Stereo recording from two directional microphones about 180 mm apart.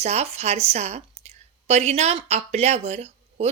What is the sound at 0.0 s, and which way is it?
A woman's voice, 35° right (ahead or behind).